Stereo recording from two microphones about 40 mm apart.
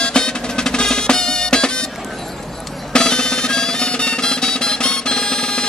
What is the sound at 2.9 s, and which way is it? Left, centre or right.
Music, centre.